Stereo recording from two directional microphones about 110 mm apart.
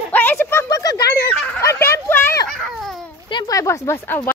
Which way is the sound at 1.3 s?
15° left (ahead or behind).